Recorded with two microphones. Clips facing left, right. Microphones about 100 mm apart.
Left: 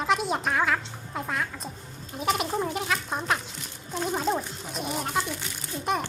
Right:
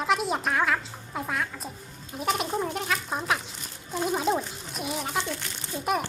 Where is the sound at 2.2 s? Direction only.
Centre (ahead or behind).